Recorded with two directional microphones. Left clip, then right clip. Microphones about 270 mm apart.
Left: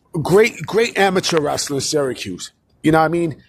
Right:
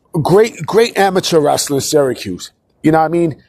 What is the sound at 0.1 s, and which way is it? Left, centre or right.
Speech, centre.